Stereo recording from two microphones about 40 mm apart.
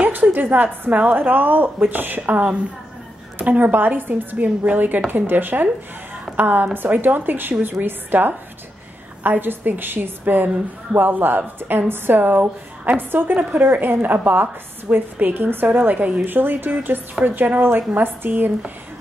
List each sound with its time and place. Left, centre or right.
0.0 s a woman's voice: right